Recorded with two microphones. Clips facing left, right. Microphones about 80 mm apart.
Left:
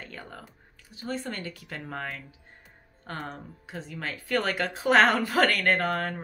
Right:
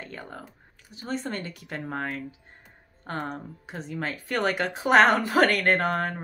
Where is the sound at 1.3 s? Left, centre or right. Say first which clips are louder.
Right 3 dB; right.